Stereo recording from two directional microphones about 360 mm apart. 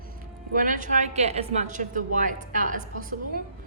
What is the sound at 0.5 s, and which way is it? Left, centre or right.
A woman's voice, right.